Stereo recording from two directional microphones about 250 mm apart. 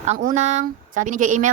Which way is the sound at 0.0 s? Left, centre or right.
Right.